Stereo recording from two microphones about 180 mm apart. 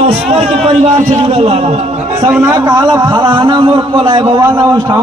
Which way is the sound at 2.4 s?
20° right (ahead or behind).